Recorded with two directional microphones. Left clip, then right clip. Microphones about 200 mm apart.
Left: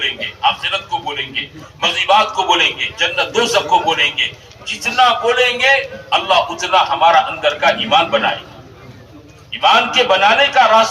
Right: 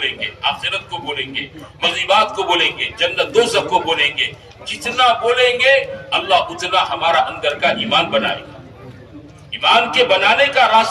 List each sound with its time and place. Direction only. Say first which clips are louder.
0.0 s a sound: left 3 dB; 15° left (ahead or behind)
1.8 s a man's voice: left 2 dB; 15° left (ahead or behind)
9.5 s a man's voice: left 2 dB; 15° left (ahead or behind)